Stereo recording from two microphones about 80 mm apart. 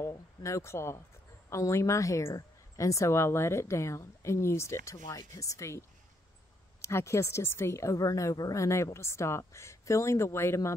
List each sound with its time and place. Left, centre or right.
0.0 s a woman's voice: left